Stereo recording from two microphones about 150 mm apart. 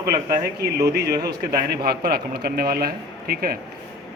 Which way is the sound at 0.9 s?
90° right.